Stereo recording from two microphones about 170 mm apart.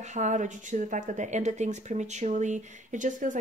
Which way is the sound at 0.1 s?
45° right (ahead or behind).